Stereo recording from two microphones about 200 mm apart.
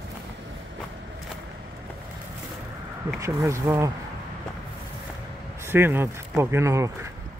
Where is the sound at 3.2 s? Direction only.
15° right (ahead or behind).